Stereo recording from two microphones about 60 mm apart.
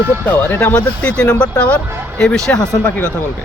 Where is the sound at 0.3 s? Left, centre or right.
Left.